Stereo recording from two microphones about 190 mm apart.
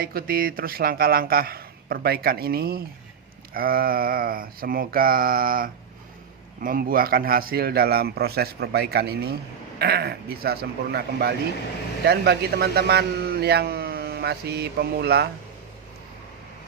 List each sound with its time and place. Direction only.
0.0 s a man's voice: 50° right (ahead or behind)